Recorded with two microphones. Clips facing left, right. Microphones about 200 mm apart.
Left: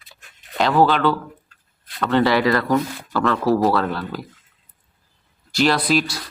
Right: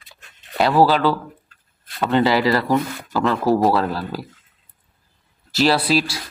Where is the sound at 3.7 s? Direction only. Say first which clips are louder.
Right 1 dB; 30° right (ahead or behind).